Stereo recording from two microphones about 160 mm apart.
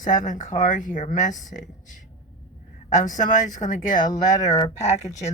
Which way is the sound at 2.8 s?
50° left (ahead or behind).